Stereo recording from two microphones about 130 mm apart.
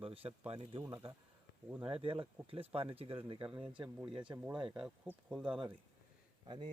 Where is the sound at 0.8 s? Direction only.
25° right (ahead or behind).